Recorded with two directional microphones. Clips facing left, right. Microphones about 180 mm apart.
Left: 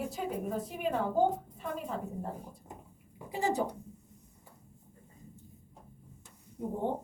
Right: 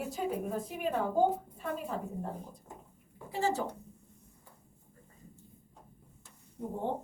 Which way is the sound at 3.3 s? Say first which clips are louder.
Left 1 dB; 15° left (ahead or behind).